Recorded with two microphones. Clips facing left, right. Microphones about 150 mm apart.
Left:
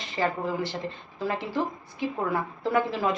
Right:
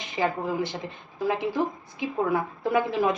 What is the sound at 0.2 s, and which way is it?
A woman's voice, 15° right (ahead or behind).